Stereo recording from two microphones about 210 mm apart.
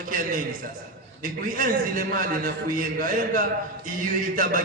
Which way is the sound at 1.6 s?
40° right (ahead or behind).